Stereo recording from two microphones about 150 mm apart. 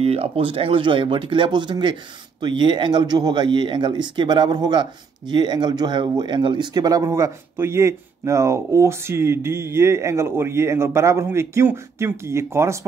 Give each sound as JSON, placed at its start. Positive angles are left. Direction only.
{"t": 0.0, "sound": "speech", "side_deg": -40}